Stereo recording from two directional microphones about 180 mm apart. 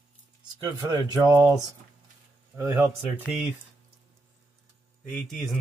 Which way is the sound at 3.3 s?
5° right (ahead or behind).